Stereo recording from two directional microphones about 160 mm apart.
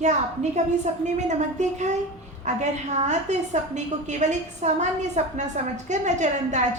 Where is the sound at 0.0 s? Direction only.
45° right (ahead or behind).